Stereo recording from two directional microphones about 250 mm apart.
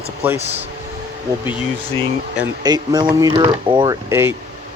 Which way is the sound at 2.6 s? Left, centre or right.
Centre.